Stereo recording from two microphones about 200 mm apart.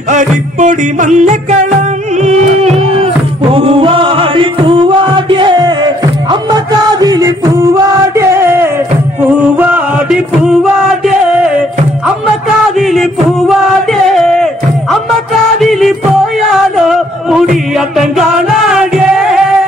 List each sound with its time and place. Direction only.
0.1 s music: 40° right (ahead or behind); by 10.6 s 5° right (ahead or behind)
12.7 s music: centre (ahead or behind)
14.0 s a sound: centre (ahead or behind)
15.6 s music: centre (ahead or behind)
16.3 s chant: centre (ahead or behind)